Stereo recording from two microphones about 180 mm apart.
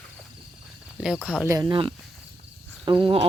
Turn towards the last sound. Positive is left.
turn(degrees=-30)  # may be behind; listen again after turning